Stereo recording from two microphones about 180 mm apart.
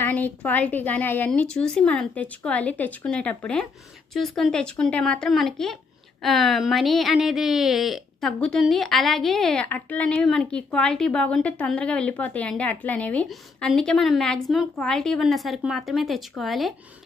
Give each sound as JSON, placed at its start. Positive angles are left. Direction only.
{"t": 0.0, "sound": "a woman's voice", "side_deg": 10}